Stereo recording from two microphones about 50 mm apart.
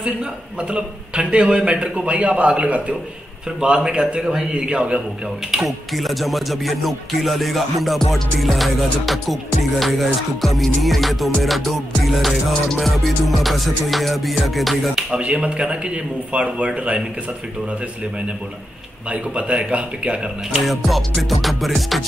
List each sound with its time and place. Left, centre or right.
0.0 s a man's voice: right
5.9 s music: centre
15.0 s a man's voice: right
19.0 s a man's voice: right
20.6 s music: centre